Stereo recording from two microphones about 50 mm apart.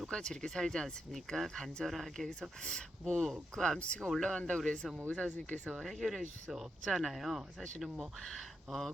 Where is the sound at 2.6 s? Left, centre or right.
Centre.